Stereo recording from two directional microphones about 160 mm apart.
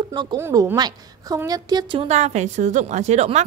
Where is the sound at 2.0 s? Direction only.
45° right (ahead or behind).